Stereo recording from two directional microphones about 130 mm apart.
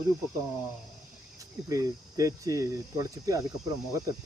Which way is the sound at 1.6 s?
25° right (ahead or behind).